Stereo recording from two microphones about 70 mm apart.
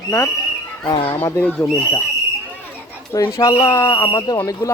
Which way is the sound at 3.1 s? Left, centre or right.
Left.